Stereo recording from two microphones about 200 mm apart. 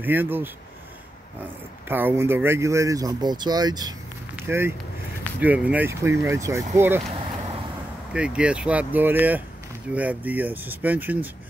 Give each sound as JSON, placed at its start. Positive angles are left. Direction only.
{"t": 0.0, "sound": "speech", "side_deg": -10}
{"t": 1.9, "sound": "speech", "side_deg": -10}
{"t": 8.1, "sound": "speech", "side_deg": -5}